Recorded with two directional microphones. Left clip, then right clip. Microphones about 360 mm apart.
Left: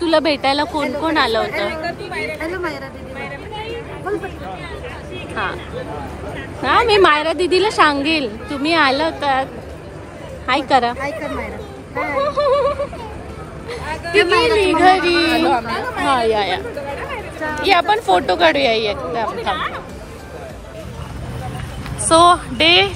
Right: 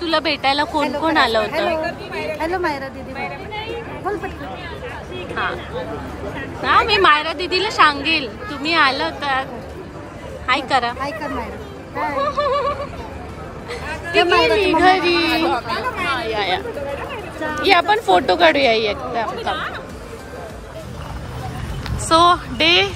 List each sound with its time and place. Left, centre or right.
0.0 s a woman's voice: centre
5.3 s speech: centre
6.6 s a woman's voice: centre
10.5 s a woman's voice: centre
12.0 s a woman's voice: centre
15.5 s speech: centre
16.0 s a woman's voice: centre
22.0 s a woman's voice: centre